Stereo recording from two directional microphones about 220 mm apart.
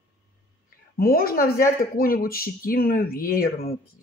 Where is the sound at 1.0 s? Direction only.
40° left (ahead or behind).